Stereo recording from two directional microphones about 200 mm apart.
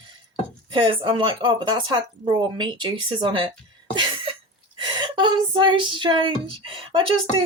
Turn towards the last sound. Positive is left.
turn(degrees=-25)  # may be behind; listen again after turning